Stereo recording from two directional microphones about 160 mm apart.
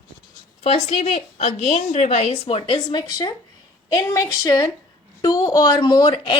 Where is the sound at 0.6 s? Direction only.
45° left (ahead or behind).